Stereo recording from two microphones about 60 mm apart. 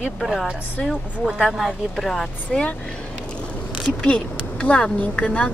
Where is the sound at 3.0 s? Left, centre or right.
Centre.